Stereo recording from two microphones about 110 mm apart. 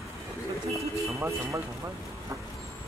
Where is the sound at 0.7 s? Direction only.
30° right (ahead or behind).